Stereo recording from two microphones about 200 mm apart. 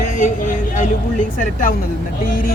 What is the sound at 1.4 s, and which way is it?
A man's voice, 40° left (ahead or behind).